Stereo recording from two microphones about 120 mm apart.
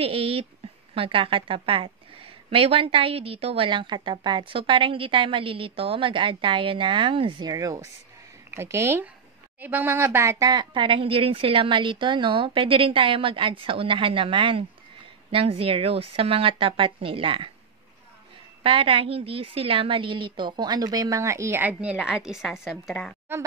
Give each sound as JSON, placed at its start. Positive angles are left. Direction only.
{"t": 0.0, "sound": "a woman's voice", "side_deg": -50}
{"t": 10.5, "sound": "a woman's voice", "side_deg": -40}
{"t": 18.6, "sound": "a woman's voice", "side_deg": -50}
{"t": 21.9, "sound": "a woman's voice", "side_deg": -5}